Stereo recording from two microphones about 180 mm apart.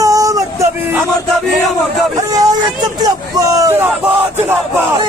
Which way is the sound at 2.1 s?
20° right (ahead or behind).